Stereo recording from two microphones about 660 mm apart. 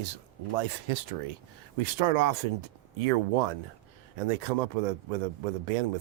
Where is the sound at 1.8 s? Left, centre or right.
Right.